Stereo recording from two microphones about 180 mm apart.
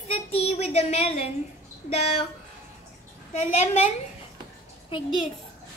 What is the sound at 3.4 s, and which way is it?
Speech, 40° left (ahead or behind).